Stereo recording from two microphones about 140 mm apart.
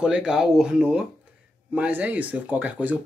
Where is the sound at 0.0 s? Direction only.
5° right (ahead or behind).